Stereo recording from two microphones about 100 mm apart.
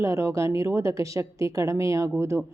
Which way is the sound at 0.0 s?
30° right (ahead or behind).